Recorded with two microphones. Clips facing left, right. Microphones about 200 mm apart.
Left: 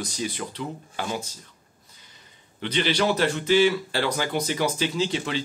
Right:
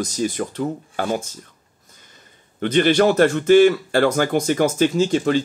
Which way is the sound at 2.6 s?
50° right (ahead or behind).